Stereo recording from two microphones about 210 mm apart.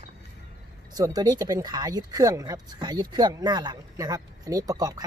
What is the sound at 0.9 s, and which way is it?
Speech, 20° right (ahead or behind).